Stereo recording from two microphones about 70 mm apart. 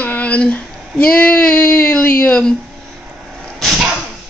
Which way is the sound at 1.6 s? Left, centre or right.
Left.